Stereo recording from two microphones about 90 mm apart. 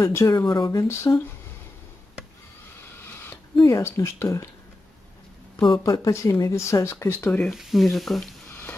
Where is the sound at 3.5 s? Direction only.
50° left (ahead or behind).